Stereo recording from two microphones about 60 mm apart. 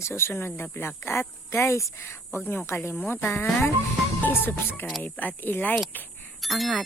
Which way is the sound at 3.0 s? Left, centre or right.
Left.